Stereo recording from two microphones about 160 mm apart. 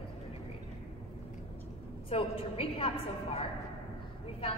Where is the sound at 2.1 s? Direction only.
40° left (ahead or behind).